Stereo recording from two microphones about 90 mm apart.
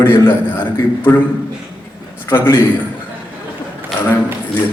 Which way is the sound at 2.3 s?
30° left (ahead or behind).